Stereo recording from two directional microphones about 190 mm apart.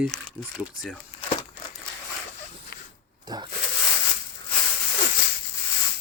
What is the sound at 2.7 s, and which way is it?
Zipper, 55° left (ahead or behind).